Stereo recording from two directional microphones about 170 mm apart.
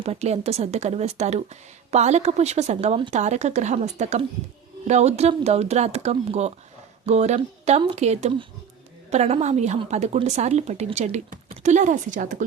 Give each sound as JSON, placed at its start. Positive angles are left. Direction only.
{"t": 0.0, "sound": "a woman's voice", "side_deg": -40}